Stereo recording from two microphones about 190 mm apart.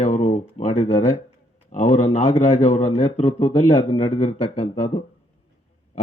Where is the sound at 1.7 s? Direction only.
40° left (ahead or behind).